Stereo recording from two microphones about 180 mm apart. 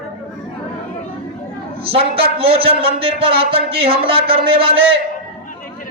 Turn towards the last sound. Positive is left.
turn(degrees=-30)  # may be behind; listen again after turning